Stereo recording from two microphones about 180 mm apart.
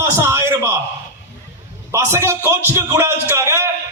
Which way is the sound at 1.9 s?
15° right (ahead or behind).